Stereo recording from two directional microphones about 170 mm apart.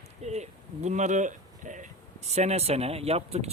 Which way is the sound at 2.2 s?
40° right (ahead or behind).